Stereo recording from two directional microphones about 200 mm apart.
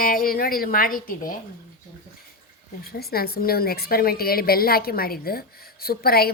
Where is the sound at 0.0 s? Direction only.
45° left (ahead or behind).